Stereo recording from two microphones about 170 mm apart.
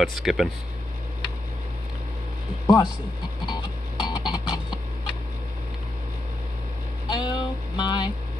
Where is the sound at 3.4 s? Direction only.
25° left (ahead or behind).